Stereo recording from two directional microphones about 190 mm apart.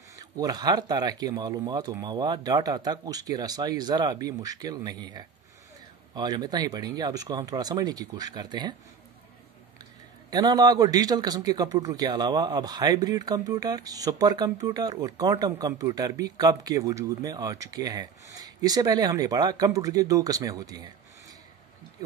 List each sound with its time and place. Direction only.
0.1 s a man's voice: 20° right (ahead or behind)
10.3 s a man's voice: 20° right (ahead or behind)